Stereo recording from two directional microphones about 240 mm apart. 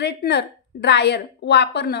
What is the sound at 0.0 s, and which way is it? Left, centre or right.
Speech, left.